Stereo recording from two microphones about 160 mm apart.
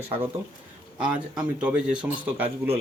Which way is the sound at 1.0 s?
5° right (ahead or behind).